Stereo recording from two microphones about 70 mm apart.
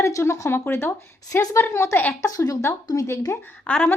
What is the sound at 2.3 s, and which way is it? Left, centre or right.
Speech, left.